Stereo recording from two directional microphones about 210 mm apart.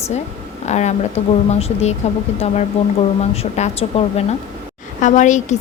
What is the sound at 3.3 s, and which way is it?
A woman's voice, 30° left (ahead or behind).